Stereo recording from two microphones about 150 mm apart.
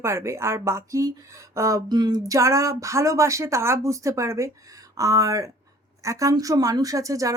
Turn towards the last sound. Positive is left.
turn(degrees=-20)  # may be behind; listen again after turning